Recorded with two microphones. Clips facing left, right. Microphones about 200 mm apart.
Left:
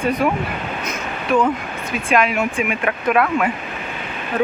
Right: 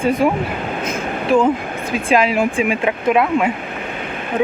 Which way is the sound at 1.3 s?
30° right (ahead or behind).